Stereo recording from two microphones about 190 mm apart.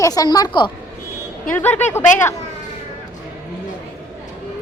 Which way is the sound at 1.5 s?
10° left (ahead or behind).